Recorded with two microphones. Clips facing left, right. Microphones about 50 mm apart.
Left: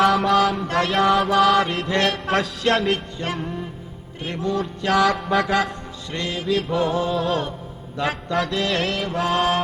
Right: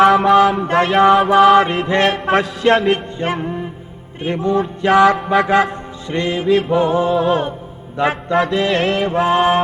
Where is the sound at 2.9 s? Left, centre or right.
Right.